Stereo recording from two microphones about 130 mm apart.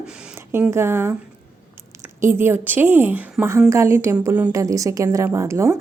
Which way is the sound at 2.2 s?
20° right (ahead or behind).